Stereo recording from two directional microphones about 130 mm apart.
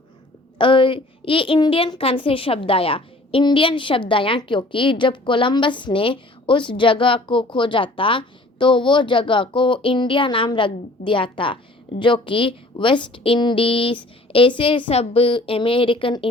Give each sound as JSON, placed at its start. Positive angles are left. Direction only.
{"t": 0.6, "sound": "a woman's voice", "side_deg": 40}